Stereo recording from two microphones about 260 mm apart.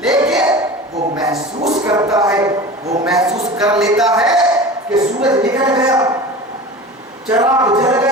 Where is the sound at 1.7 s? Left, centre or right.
Centre.